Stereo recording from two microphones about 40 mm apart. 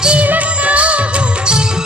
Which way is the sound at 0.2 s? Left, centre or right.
Right.